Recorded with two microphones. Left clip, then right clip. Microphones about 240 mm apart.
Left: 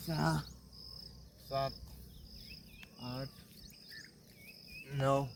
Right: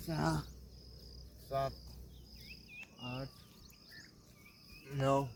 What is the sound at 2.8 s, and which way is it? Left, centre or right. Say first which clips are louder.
Cricket: left 1 dB; centre.